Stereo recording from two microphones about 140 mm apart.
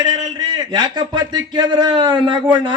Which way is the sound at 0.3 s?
30° right (ahead or behind).